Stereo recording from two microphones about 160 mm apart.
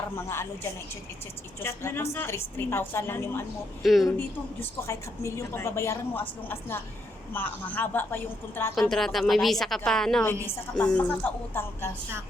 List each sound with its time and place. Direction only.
0.2 s a woman's voice: 15° left (ahead or behind)
3.8 s a woman's voice: centre (ahead or behind)
4.6 s a woman's voice: 20° left (ahead or behind)
8.7 s a woman's voice: centre (ahead or behind)
10.2 s a woman's voice: 15° left (ahead or behind)